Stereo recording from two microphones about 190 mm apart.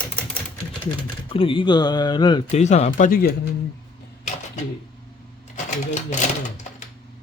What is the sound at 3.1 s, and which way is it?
Speech, 50° left (ahead or behind).